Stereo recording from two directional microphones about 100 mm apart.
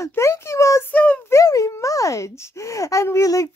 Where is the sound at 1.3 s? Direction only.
35° left (ahead or behind).